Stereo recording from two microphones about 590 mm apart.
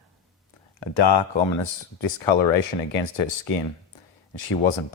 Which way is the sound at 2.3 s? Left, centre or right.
Left.